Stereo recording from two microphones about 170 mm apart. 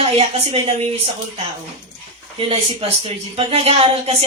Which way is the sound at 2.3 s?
35° right (ahead or behind).